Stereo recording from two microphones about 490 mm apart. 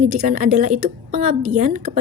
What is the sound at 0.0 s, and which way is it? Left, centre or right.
A woman's voice, centre.